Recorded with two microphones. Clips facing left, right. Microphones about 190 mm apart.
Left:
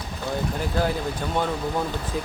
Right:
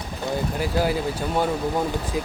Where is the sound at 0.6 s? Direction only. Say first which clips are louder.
Right 3 dB; 10° right (ahead or behind).